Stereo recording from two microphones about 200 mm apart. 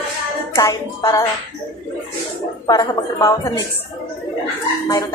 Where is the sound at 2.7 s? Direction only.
20° left (ahead or behind).